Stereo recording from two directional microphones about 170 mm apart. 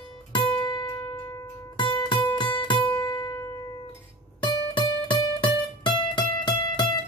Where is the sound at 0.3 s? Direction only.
25° left (ahead or behind).